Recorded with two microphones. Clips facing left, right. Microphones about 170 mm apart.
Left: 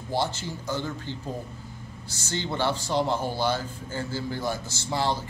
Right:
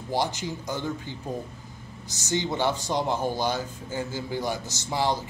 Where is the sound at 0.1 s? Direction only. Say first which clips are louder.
Right 1 dB; 15° right (ahead or behind).